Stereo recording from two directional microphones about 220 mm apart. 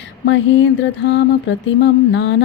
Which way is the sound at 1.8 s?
50° left (ahead or behind).